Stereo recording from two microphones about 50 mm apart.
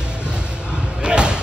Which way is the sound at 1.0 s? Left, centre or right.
Centre.